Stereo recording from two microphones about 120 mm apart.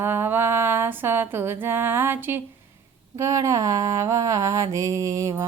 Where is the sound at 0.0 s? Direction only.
20° right (ahead or behind).